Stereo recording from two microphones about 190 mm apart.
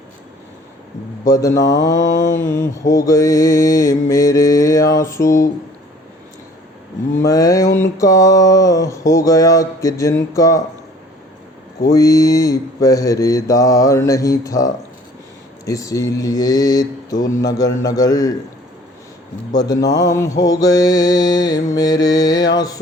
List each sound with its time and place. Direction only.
1.2 s mantra: 15° left (ahead or behind)
7.2 s mantra: 15° left (ahead or behind)
11.9 s mantra: 15° left (ahead or behind)
19.5 s mantra: 20° left (ahead or behind)